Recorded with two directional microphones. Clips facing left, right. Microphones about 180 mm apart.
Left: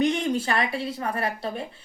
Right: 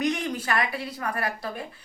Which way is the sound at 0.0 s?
25° left (ahead or behind).